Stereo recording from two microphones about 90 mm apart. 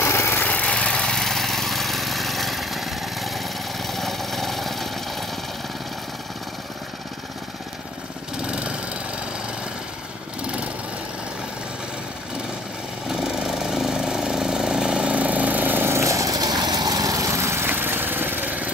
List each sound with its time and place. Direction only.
0.0 s vehicle: 25° left (ahead or behind); by 4.8 s centre (ahead or behind)
8.5 s lawn mower: 10° right (ahead or behind)
13.1 s vehicle: 5° right (ahead or behind); by 17.6 s 30° right (ahead or behind)
17.6 s lawn mower: 25° right (ahead or behind)